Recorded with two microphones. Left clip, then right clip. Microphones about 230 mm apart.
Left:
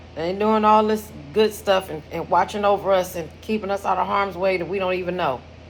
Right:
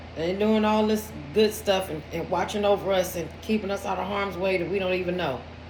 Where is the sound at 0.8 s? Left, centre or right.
Centre.